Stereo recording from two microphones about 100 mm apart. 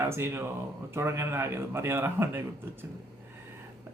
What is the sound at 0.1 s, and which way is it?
A man's voice, 25° right (ahead or behind).